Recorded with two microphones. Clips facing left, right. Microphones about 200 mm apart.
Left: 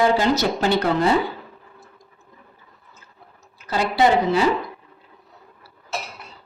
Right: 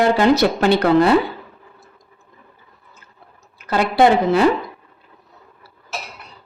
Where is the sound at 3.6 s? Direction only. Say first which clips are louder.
Right 4 dB; 60° right (ahead or behind).